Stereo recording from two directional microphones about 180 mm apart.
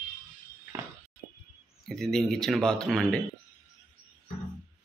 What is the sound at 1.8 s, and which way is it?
Speech, centre (ahead or behind).